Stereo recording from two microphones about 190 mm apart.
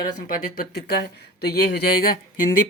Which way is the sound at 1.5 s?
55° left (ahead or behind).